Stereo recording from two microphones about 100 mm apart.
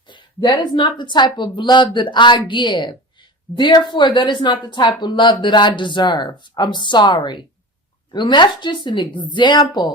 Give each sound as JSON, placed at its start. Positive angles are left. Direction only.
{"t": 0.1, "sound": "a woman's voice", "side_deg": 50}